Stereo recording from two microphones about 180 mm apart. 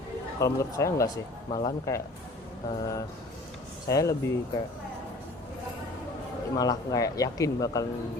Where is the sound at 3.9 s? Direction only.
15° left (ahead or behind).